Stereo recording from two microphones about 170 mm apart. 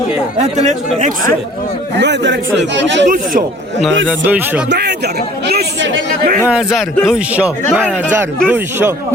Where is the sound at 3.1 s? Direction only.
50° right (ahead or behind).